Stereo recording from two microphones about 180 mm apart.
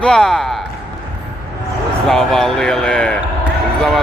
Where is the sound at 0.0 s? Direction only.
5° left (ahead or behind).